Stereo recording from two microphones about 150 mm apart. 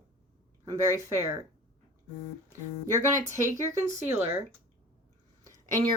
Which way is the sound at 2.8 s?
20° right (ahead or behind).